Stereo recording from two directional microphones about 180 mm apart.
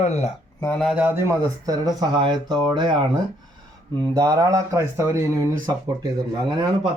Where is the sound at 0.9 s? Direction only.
10° right (ahead or behind).